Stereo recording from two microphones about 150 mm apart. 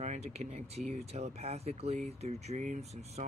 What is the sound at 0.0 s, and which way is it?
Speech, 45° right (ahead or behind).